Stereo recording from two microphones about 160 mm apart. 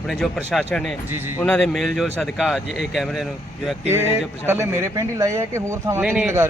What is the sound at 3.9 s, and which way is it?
Speech, 15° right (ahead or behind).